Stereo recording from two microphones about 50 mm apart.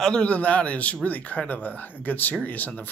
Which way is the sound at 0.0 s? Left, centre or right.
Centre.